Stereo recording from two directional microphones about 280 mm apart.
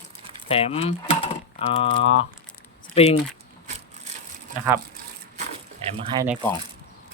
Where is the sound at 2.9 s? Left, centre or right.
Left.